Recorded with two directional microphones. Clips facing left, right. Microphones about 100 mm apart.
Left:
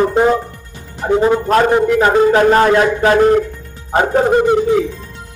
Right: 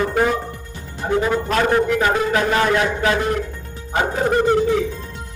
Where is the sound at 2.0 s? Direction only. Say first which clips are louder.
Left 7 dB; 35° left (ahead or behind).